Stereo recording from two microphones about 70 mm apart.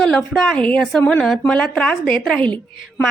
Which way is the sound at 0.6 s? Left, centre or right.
Centre.